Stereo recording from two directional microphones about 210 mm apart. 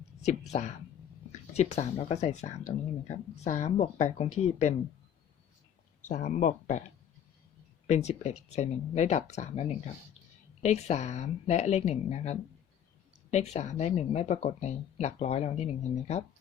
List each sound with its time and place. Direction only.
0.3 s speech: 30° left (ahead or behind)
6.1 s speech: 35° left (ahead or behind)
7.9 s speech: 30° left (ahead or behind)